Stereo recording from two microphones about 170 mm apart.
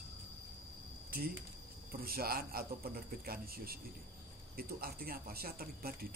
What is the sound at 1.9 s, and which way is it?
A man's voice, 60° right (ahead or behind).